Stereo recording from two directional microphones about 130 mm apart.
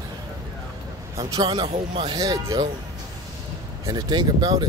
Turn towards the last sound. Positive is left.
turn(degrees=-30)  # may be behind; listen again after turning